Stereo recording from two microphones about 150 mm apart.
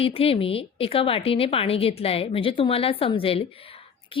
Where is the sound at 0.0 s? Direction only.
40° left (ahead or behind).